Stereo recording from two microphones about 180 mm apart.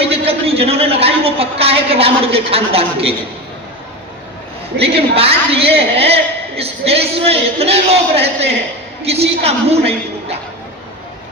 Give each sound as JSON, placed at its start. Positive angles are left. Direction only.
{"t": 0.1, "sound": "a woman's voice", "side_deg": -35}
{"t": 4.8, "sound": "a woman's voice", "side_deg": -35}